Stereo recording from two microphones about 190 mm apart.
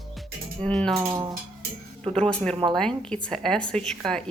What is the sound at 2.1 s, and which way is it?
A woman's voice, 5° left (ahead or behind).